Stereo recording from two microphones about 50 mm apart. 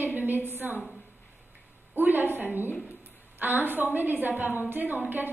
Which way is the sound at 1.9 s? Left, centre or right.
Right.